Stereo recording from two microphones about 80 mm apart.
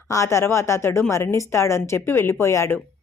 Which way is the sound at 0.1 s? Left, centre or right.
Left.